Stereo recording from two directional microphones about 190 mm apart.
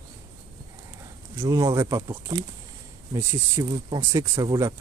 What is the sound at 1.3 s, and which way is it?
Speech, 15° right (ahead or behind).